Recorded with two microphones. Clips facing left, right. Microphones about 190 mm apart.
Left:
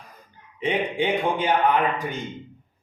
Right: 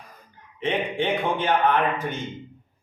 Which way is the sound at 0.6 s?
15° left (ahead or behind).